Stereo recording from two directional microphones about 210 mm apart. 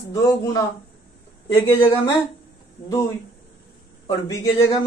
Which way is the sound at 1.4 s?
30° left (ahead or behind).